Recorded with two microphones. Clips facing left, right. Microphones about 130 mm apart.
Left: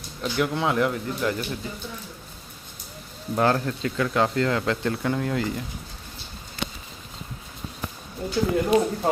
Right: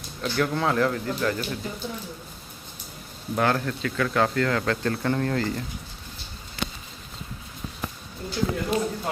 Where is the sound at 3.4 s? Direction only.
25° left (ahead or behind); by 5.6 s 10° left (ahead or behind).